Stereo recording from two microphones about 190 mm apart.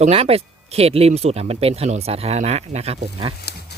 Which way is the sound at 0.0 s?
30° right (ahead or behind).